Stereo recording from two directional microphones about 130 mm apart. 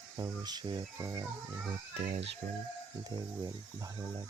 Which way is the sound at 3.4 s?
25° right (ahead or behind).